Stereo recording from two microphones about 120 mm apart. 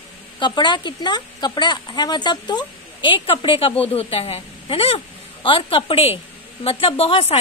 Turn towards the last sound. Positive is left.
turn(degrees=55)  # may be behind; listen again after turning